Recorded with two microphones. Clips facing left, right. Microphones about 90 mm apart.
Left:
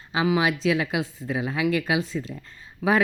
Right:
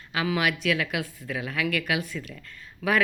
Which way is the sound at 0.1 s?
25° left (ahead or behind).